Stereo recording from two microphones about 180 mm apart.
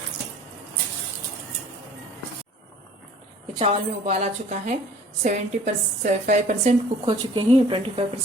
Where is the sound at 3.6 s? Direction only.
35° right (ahead or behind).